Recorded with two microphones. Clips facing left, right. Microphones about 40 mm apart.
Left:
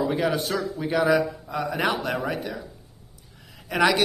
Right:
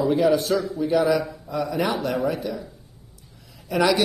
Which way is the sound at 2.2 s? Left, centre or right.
Left.